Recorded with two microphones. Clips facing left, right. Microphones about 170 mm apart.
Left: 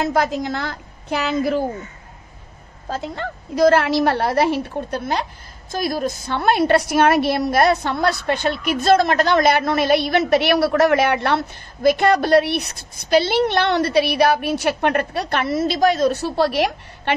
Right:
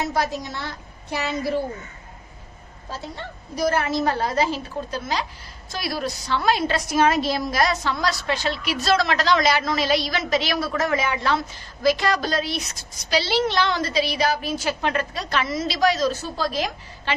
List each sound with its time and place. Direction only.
0.4 s a woman's voice: 90° left
2.9 s a woman's voice: 55° left (ahead or behind)
5.7 s a woman's voice: 45° left (ahead or behind); by 17.1 s 70° left (ahead or behind)